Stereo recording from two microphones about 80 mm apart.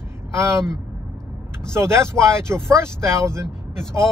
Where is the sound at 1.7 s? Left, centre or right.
Right.